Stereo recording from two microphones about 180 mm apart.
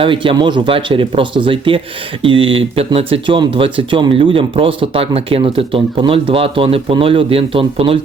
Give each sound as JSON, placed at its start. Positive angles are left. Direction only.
{"t": 0.0, "sound": "speech", "side_deg": -30}